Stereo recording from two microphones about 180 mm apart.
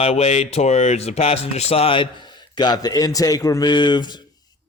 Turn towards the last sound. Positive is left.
turn(degrees=25)  # may be behind; listen again after turning